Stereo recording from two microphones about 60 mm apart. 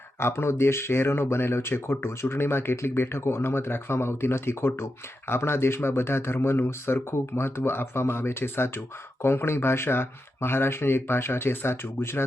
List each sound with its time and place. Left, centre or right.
0.2 s speech: left